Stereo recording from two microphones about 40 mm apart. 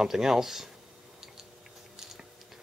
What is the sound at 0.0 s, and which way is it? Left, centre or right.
Speech, centre.